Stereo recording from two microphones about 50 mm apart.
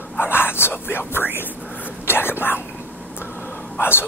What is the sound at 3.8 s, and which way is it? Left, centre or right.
Dog, left.